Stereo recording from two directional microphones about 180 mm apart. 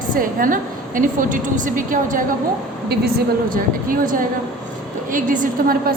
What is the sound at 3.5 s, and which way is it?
A woman's voice, 50° right (ahead or behind).